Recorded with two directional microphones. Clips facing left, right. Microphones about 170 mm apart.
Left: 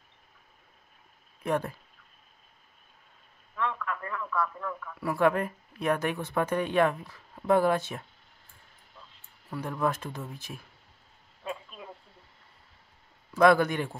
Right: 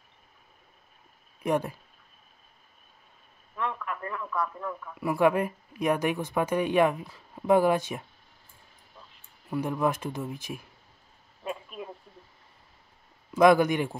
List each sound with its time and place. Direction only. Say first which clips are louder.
1.4 s speech: right 2 dB; 10° right (ahead or behind)
3.5 s a sound: even; 15° right (ahead or behind)
4.0 s speech: even; 15° right (ahead or behind)
9.5 s speech: right 3 dB; 15° right (ahead or behind)
11.4 s a sound: right 3 dB; 15° right (ahead or behind)
13.3 s speech: right 2 dB; 15° right (ahead or behind)